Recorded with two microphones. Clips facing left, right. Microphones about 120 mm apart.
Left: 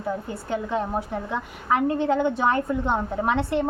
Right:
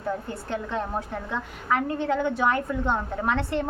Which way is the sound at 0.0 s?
10° left (ahead or behind).